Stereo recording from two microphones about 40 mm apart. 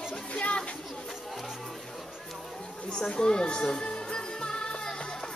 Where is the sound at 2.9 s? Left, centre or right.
Centre.